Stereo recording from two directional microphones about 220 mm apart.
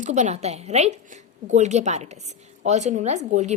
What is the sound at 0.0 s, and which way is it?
A woman's voice, 30° right (ahead or behind).